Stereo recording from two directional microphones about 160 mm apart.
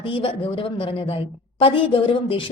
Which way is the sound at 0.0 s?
35° left (ahead or behind).